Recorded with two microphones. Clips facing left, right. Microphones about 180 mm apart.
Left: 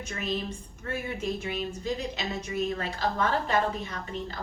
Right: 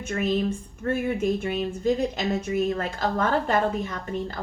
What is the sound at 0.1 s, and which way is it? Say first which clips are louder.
Speech: right 9 dB; 50° right (ahead or behind).